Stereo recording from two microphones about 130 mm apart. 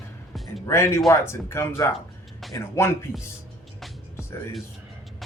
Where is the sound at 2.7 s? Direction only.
20° left (ahead or behind).